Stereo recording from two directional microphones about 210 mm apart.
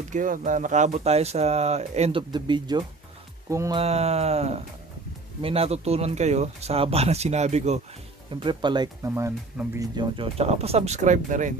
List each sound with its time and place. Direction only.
0.1 s speech: 40° right (ahead or behind); by 3.8 s 15° right (ahead or behind)
3.8 s speech: 30° right (ahead or behind)